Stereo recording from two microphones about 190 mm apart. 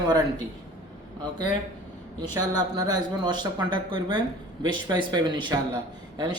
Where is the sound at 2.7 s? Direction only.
20° right (ahead or behind).